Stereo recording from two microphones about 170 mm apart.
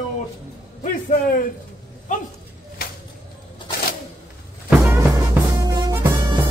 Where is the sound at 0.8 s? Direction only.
50° left (ahead or behind).